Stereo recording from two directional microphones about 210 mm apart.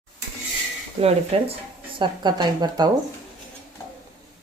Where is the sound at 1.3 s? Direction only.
30° right (ahead or behind).